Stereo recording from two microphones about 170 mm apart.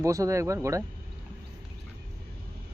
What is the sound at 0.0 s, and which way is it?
Speech, 20° right (ahead or behind).